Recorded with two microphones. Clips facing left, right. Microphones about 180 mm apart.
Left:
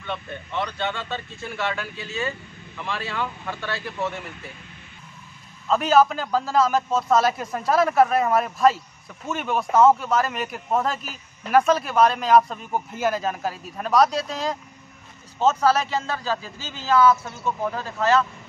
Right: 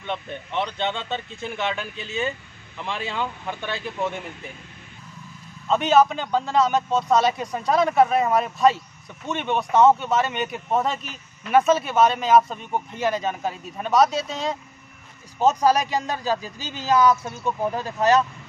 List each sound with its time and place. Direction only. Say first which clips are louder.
0.0 s speech: right 2 dB; 20° right (ahead or behind)
5.7 s a man's voice: even; centre (ahead or behind)
15.3 s speech: right 1 dB; 15° right (ahead or behind)